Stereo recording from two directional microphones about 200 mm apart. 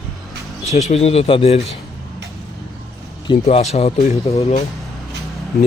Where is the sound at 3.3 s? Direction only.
30° left (ahead or behind).